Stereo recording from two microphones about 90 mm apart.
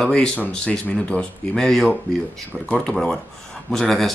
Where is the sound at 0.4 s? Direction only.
15° left (ahead or behind).